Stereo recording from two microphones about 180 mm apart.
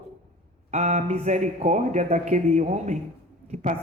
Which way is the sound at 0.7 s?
40° right (ahead or behind).